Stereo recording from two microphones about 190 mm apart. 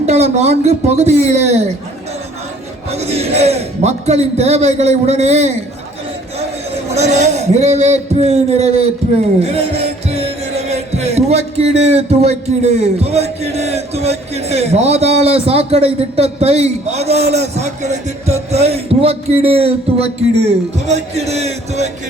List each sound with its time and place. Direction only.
0.0 s heart murmur: 35° right (ahead or behind)
2.9 s heart murmur: 35° right (ahead or behind)
6.9 s heart murmur: 35° right (ahead or behind)
10.1 s heart murmur: 35° right (ahead or behind)